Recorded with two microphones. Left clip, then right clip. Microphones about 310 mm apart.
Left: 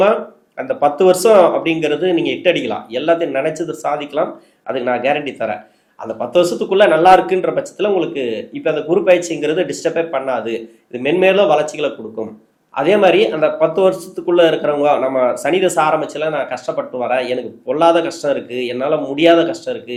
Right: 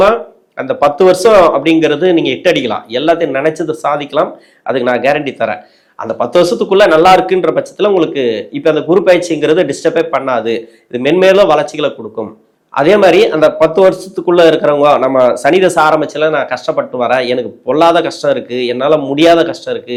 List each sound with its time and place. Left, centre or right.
0.0 s speech: right